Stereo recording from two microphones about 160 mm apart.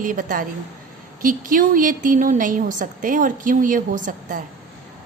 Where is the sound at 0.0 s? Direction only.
55° right (ahead or behind).